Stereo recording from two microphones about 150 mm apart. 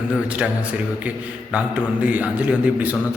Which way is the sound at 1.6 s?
10° right (ahead or behind).